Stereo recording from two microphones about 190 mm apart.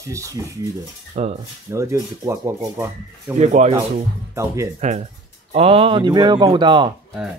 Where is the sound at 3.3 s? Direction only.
35° right (ahead or behind).